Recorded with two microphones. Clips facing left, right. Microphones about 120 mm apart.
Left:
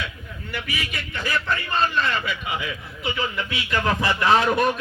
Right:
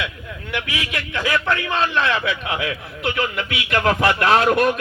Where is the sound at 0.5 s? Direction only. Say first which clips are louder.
Right 4 dB; 85° right.